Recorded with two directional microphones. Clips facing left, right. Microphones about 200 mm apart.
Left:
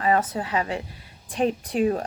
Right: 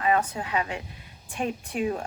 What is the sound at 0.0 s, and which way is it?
Speech, 35° left (ahead or behind).